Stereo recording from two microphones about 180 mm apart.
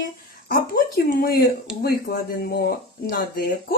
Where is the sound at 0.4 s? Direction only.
55° left (ahead or behind).